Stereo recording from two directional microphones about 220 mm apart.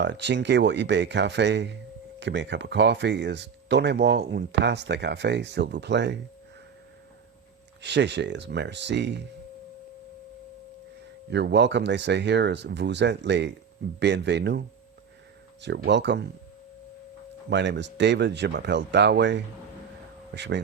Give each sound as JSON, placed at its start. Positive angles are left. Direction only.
{"t": 0.0, "sound": "speech", "side_deg": -55}
{"t": 7.8, "sound": "speech", "side_deg": -50}
{"t": 11.3, "sound": "speech", "side_deg": -50}
{"t": 15.6, "sound": "speech", "side_deg": -50}
{"t": 17.5, "sound": "speech", "side_deg": -55}